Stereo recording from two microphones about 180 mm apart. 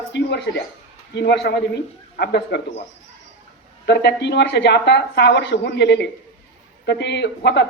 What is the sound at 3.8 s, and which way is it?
Speech, 70° left (ahead or behind).